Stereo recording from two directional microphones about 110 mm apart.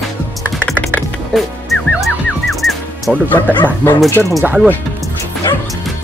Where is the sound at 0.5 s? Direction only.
5° left (ahead or behind).